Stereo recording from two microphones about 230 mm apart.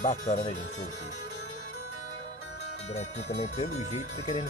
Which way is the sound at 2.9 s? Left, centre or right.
Left.